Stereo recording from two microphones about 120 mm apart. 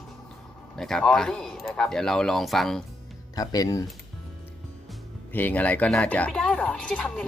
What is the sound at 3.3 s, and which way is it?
Speech, 30° left (ahead or behind).